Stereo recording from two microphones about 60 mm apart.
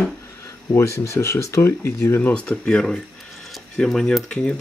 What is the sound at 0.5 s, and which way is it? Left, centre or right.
Speech, left.